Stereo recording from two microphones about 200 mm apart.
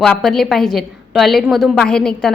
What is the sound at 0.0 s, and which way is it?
A woman's voice, centre (ahead or behind).